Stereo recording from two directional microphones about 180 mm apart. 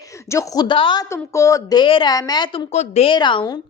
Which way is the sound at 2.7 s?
40° left (ahead or behind).